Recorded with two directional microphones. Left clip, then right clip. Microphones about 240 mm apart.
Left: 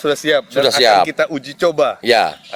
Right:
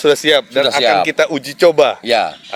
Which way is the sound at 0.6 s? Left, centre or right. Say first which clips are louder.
Left 5 dB; left.